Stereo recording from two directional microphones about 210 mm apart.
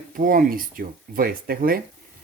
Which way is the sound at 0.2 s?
40° right (ahead or behind).